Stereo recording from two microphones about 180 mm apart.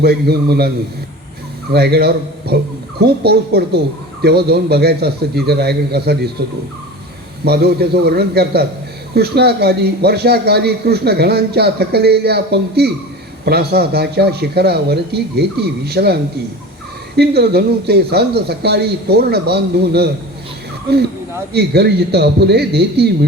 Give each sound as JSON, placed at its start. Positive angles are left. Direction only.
{"t": 0.0, "sound": "a man's voice", "side_deg": -60}
{"t": 1.7, "sound": "a man's voice", "side_deg": -65}
{"t": 7.4, "sound": "a man's voice", "side_deg": -60}
{"t": 17.2, "sound": "a man's voice", "side_deg": -65}
{"t": 21.5, "sound": "a man's voice", "side_deg": -65}